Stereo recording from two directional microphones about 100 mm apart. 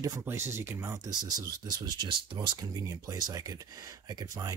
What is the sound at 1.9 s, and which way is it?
Speech, 50° right (ahead or behind).